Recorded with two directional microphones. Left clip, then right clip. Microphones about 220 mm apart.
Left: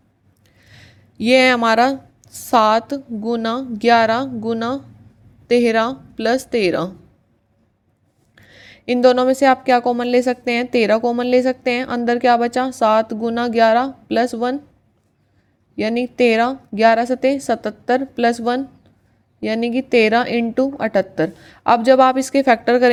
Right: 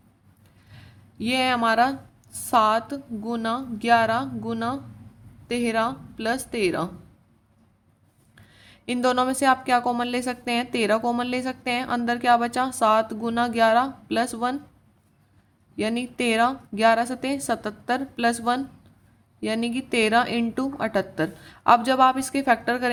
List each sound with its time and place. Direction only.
0.6 s a woman's voice: 30° left (ahead or behind)
8.4 s a woman's voice: 20° left (ahead or behind)
15.7 s a woman's voice: 20° left (ahead or behind)